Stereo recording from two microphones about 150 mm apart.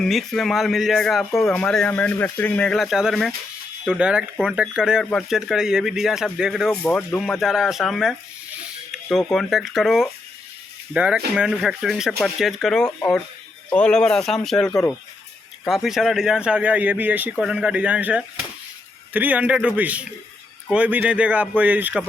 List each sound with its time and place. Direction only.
0.0 s speech: centre (ahead or behind)